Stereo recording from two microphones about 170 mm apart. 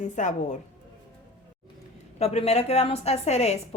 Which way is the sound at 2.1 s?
40° left (ahead or behind).